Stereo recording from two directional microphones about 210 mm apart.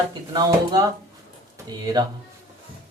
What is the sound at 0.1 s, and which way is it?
Speech, 20° right (ahead or behind).